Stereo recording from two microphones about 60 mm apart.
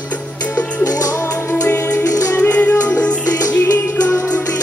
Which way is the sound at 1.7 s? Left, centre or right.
Left.